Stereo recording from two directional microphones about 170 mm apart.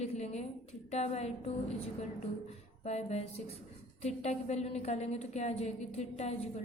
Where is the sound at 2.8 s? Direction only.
40° left (ahead or behind).